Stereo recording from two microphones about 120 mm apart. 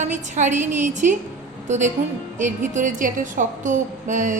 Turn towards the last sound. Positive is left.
turn(degrees=-90)